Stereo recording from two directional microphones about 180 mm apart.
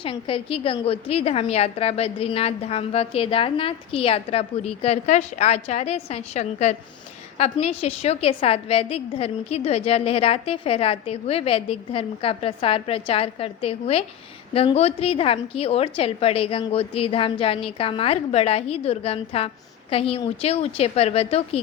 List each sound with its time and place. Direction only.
0.0 s a woman's voice: 30° left (ahead or behind)